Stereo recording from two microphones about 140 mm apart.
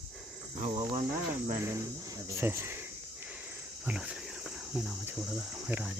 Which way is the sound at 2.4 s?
15° right (ahead or behind).